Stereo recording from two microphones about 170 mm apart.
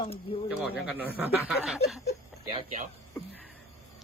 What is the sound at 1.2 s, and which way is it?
Snicker, 5° right (ahead or behind).